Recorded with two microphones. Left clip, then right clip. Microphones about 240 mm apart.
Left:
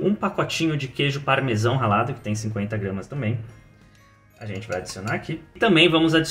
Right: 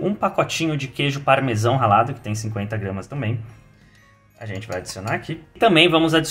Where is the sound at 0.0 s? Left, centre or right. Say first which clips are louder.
Right 3 dB; right.